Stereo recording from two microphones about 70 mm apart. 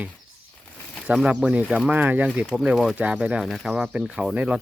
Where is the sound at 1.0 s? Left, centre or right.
Centre.